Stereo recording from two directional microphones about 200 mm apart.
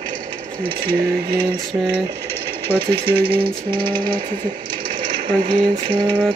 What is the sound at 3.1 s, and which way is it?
Speech, 50° right (ahead or behind).